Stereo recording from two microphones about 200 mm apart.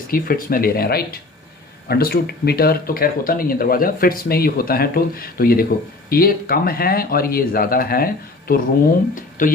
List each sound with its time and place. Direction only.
0.1 s speech: 45° left (ahead or behind)